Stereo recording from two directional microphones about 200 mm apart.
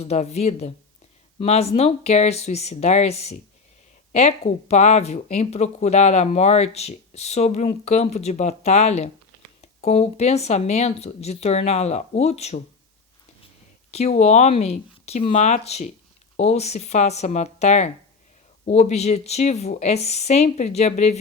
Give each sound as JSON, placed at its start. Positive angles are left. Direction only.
{"t": 0.0, "sound": "speech", "side_deg": 30}
{"t": 13.9, "sound": "speech", "side_deg": 35}